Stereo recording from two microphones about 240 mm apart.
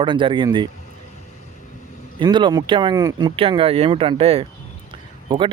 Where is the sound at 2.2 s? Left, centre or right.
Centre.